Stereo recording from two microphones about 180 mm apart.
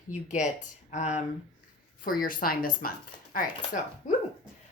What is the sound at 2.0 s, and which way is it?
Speech, 50° left (ahead or behind).